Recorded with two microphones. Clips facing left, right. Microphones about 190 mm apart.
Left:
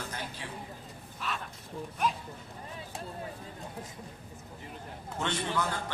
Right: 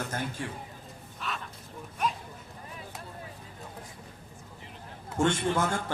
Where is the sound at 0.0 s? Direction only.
45° right (ahead or behind).